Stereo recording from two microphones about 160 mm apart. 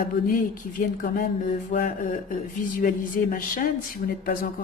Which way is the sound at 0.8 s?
55° left (ahead or behind).